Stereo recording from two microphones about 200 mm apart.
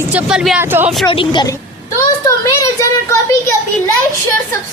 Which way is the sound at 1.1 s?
25° left (ahead or behind).